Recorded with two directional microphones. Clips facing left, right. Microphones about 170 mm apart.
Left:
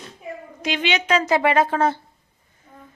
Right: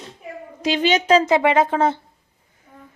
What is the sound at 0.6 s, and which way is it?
Speech, 40° right (ahead or behind).